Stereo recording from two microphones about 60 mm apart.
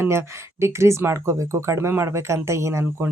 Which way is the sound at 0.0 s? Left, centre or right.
Right.